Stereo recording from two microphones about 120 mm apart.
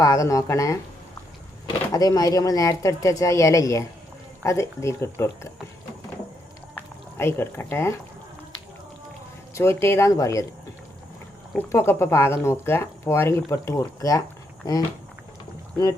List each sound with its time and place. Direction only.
0.0 s speech: 25° left (ahead or behind)
1.9 s speech: 30° left (ahead or behind)
7.2 s speech: 20° left (ahead or behind)
9.6 s speech: 25° left (ahead or behind)
11.7 s speech: 20° left (ahead or behind)